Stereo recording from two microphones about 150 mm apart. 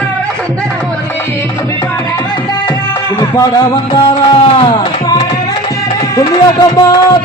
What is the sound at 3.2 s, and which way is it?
Music, 25° left (ahead or behind).